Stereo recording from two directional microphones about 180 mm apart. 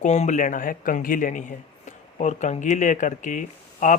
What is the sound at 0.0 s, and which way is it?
Speech, 40° left (ahead or behind).